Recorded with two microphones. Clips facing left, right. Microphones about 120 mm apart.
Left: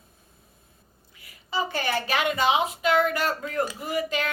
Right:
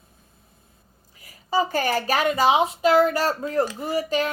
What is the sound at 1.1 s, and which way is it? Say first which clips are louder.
A woman's voice: right 6 dB; 40° right (ahead or behind).